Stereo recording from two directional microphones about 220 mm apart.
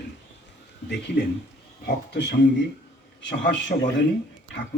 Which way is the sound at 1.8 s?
50° left (ahead or behind).